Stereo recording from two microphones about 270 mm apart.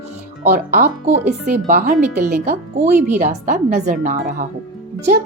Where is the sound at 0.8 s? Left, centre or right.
Right.